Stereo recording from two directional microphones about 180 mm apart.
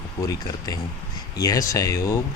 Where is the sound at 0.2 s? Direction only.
20° left (ahead or behind).